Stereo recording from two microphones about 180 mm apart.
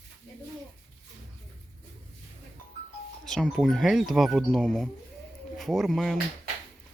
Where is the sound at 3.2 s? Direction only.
Centre (ahead or behind).